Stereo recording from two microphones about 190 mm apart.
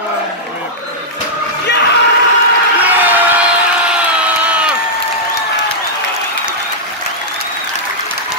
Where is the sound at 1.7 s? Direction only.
65° left (ahead or behind).